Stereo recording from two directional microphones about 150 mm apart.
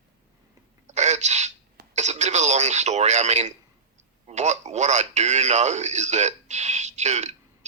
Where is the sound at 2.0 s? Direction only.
50° right (ahead or behind).